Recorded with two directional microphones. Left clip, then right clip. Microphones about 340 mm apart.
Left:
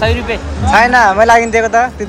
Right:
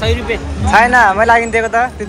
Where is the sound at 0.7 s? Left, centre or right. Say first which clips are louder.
Left 1 dB; centre.